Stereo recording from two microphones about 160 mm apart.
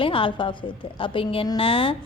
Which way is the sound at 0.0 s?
35° left (ahead or behind).